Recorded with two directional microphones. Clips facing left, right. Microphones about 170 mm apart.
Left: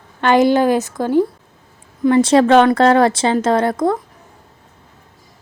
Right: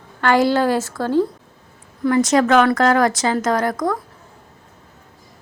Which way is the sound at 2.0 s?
25° left (ahead or behind).